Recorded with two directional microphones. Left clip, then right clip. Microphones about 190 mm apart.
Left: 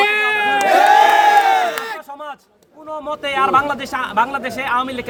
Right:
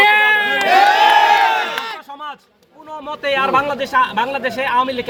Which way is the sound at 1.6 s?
75° left (ahead or behind).